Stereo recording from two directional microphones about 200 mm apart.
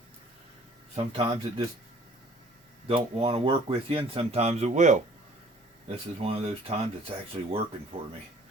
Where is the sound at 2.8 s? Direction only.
30° right (ahead or behind).